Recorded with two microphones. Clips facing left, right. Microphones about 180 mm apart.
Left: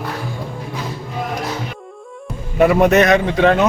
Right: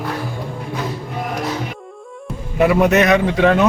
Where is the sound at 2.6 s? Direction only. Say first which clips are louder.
Left 1 dB; centre (ahead or behind).